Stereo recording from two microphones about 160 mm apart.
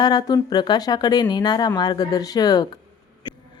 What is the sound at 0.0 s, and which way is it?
Speech, 25° left (ahead or behind).